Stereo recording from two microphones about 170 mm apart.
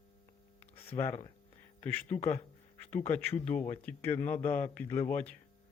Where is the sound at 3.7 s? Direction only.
10° left (ahead or behind).